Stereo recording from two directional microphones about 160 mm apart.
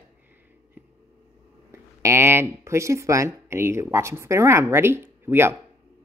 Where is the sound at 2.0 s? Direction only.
15° right (ahead or behind).